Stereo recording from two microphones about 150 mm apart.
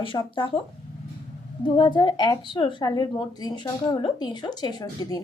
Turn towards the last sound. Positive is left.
turn(degrees=25)  # may be behind; listen again after turning